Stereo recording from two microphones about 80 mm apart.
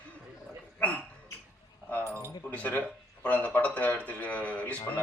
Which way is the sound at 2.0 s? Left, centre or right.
Right.